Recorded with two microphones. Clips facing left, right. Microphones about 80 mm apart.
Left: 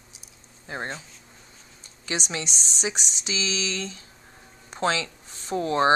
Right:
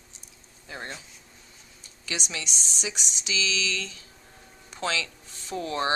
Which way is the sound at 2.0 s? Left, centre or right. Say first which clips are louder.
Left 4 dB; left.